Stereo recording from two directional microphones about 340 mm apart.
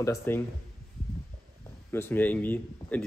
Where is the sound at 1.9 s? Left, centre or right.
Centre.